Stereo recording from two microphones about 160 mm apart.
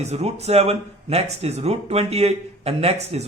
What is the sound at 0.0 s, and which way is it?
Speech, 40° right (ahead or behind).